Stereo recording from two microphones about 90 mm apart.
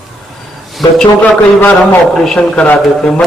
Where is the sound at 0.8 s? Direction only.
Centre (ahead or behind).